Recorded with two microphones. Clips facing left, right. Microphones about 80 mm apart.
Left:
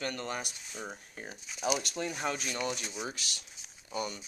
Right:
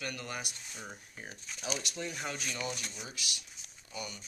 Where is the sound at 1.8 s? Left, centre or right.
Left.